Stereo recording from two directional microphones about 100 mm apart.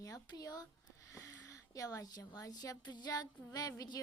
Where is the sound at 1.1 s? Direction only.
30° left (ahead or behind).